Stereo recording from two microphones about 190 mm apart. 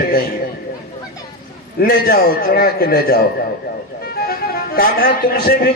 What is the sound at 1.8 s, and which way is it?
A man's voice, 50° left (ahead or behind).